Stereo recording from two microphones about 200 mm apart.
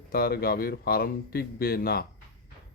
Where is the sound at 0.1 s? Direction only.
50° left (ahead or behind).